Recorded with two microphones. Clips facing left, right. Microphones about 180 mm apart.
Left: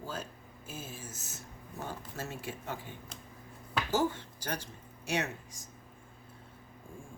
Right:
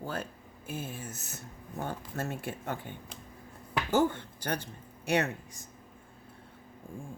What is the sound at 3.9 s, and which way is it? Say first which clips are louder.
Speech: right 4 dB; 60° right (ahead or behind).